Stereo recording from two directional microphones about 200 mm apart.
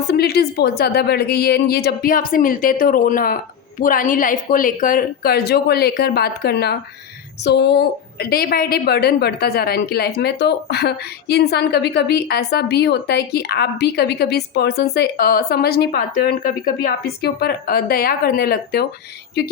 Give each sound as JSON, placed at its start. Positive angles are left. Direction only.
{"t": 0.1, "sound": "a woman's voice", "side_deg": 55}